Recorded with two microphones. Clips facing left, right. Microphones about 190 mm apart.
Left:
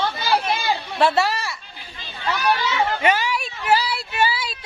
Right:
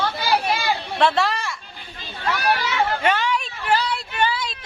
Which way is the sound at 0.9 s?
5° left (ahead or behind).